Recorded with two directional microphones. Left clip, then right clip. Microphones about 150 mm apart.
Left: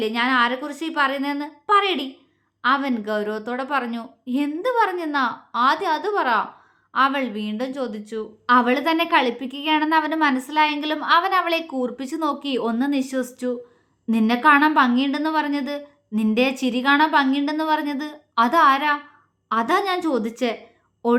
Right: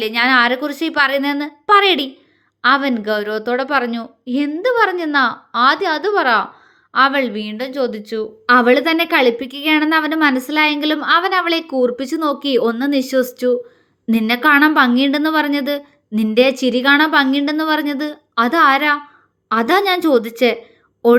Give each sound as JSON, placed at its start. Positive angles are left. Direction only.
{"t": 0.0, "sound": "a woman's voice", "side_deg": -30}